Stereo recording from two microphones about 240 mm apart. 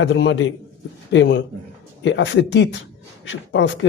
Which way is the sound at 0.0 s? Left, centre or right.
Left.